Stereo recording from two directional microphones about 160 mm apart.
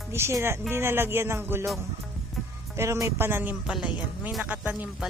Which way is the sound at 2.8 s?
20° right (ahead or behind).